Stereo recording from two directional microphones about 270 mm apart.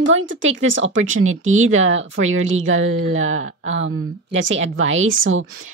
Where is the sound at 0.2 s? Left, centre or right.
Right.